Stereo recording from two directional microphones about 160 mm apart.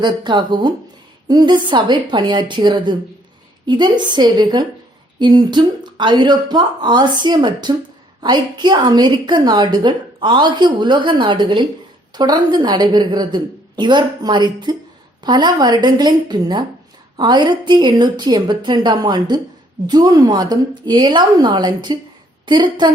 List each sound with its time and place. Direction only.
0.0 s a woman's voice: 30° right (ahead or behind)